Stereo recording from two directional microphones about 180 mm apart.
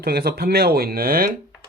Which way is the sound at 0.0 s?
60° right (ahead or behind).